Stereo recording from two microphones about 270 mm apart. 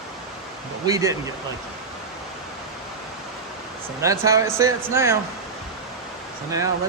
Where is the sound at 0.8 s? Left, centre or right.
Centre.